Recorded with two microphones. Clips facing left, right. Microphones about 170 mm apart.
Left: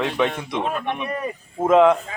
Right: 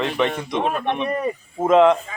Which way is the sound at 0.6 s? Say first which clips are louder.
Right 3 dB; 20° right (ahead or behind).